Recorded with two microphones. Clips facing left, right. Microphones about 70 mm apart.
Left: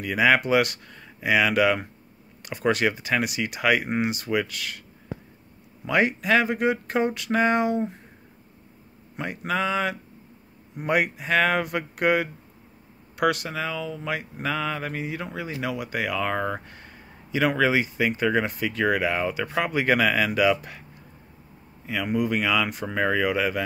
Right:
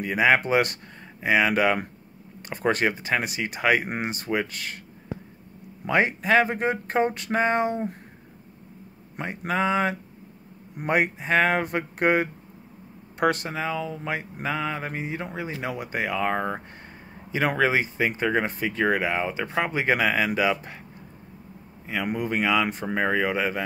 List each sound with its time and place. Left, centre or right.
0.0 s speech: right
5.9 s speech: right
9.4 s speech: right
21.8 s speech: right